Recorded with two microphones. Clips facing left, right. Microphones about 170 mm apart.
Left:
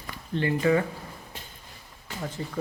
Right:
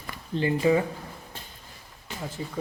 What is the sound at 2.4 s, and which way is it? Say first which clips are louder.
Speech: right 2 dB; 10° right (ahead or behind).